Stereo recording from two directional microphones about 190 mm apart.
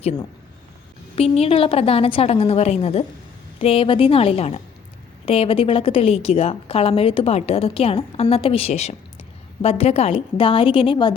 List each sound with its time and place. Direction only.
1.1 s a woman's voice: 30° left (ahead or behind)